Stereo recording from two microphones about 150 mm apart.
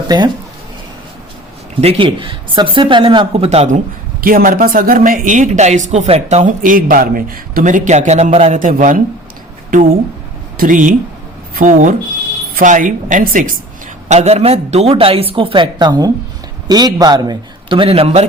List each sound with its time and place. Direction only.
0.1 s speech: 25° right (ahead or behind)
1.8 s speech: 40° right (ahead or behind)
4.2 s speech: 70° right (ahead or behind); by 8.5 s 45° right (ahead or behind)
8.5 s speech: 60° right (ahead or behind)
10.6 s speech: 60° right (ahead or behind)
14.1 s speech: 45° right (ahead or behind)